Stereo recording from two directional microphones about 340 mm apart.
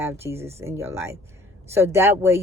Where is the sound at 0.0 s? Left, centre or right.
Centre.